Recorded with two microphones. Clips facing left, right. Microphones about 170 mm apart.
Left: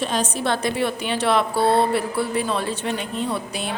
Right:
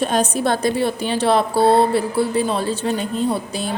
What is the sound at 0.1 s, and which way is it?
Speech, 45° right (ahead or behind).